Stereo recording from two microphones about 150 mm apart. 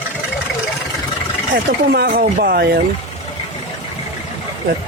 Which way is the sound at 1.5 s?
90° right.